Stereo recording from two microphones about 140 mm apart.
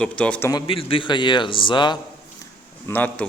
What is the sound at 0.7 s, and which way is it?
A man's voice, 40° left (ahead or behind).